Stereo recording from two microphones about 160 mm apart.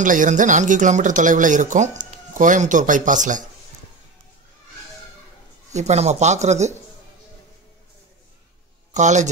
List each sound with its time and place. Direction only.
0.0 s speech: 55° right (ahead or behind)
5.7 s speech: 45° right (ahead or behind)
8.9 s speech: 50° right (ahead or behind)